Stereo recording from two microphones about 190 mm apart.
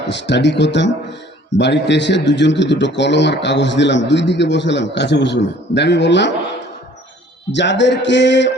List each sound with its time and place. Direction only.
0.1 s a man's voice: 70° left (ahead or behind)
7.5 s a man's voice: 70° left (ahead or behind)